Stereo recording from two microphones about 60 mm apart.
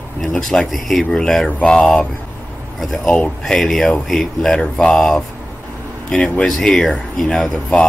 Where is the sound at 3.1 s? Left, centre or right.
Centre.